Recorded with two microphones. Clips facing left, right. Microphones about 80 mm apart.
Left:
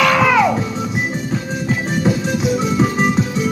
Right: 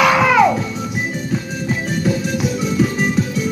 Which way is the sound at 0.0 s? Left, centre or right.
Centre.